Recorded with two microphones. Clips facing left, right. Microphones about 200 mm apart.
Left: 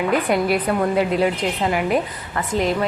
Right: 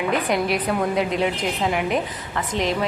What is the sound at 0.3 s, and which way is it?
A woman's voice, centre (ahead or behind).